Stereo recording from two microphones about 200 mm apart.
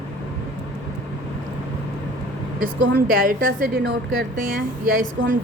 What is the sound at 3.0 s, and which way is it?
Speech, 45° right (ahead or behind).